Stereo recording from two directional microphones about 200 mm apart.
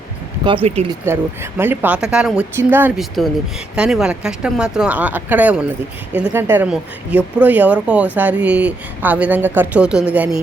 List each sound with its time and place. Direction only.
0.4 s speech: 25° right (ahead or behind)
1.0 s speech: 10° right (ahead or behind)